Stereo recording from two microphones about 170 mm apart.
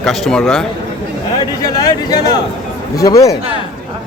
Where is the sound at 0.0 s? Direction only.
Centre (ahead or behind).